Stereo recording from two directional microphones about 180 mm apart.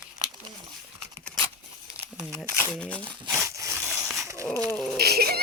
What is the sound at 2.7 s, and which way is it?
Speech, 5° left (ahead or behind).